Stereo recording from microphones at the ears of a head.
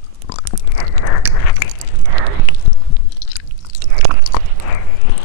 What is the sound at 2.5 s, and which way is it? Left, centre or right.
Chewing, left.